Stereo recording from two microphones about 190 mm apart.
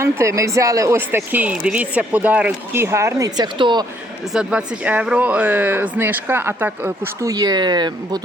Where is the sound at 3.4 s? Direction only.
25° right (ahead or behind).